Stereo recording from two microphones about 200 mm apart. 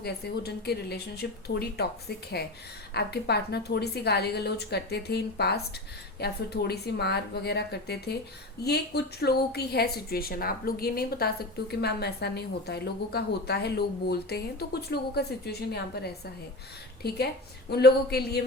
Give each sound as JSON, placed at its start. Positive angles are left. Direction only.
{"t": 0.0, "sound": "a woman's voice", "side_deg": 55}